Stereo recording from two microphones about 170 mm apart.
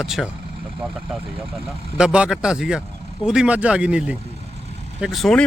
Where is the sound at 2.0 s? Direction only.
5° right (ahead or behind).